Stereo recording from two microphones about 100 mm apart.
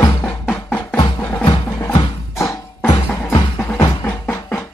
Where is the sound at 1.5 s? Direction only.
45° left (ahead or behind).